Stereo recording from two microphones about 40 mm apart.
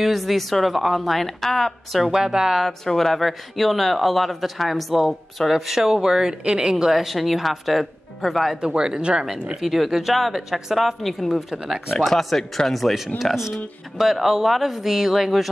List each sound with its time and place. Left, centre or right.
0.0 s a man's voice: centre
2.0 s speech: centre
2.6 s a man's voice: centre
6.4 s speech: right
6.7 s a man's voice: centre
8.5 s speech: right
9.6 s a man's voice: centre